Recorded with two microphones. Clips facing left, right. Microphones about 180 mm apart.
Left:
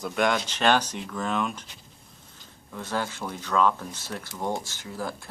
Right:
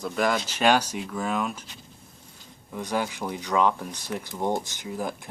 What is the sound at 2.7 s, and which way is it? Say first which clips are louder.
Speech: right 2 dB; 15° right (ahead or behind).